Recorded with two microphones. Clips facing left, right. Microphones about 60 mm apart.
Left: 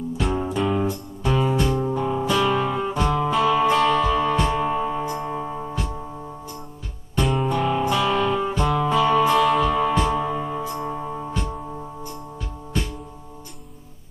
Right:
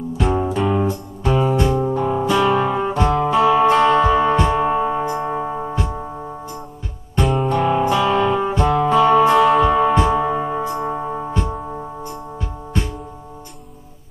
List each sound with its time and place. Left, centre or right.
0.2 s music: centre
0.8 s music: right
7.2 s music: centre
7.5 s music: right